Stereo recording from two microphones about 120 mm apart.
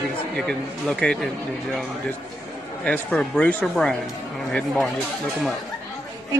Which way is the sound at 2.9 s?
10° left (ahead or behind).